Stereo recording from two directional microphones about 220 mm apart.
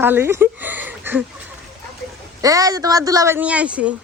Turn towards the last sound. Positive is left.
turn(degrees=-5)  # may be behind; listen again after turning